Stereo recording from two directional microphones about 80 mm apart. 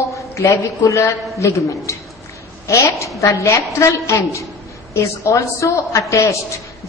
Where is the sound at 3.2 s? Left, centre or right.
Left.